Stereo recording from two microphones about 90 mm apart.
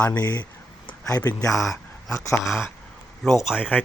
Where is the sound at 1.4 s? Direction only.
35° left (ahead or behind).